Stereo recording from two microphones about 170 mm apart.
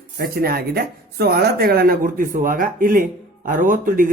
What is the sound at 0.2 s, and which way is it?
Speech, 60° right (ahead or behind).